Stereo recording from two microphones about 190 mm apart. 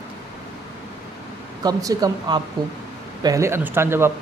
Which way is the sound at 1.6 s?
20° right (ahead or behind).